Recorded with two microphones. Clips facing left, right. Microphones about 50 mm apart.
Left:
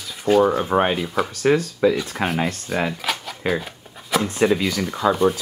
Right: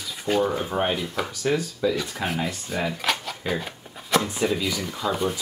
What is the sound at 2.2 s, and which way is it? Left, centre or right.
Speech, centre.